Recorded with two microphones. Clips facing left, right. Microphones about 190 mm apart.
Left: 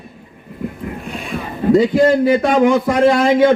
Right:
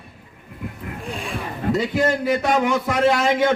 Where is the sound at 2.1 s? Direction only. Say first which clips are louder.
Left 7 dB; 55° left (ahead or behind).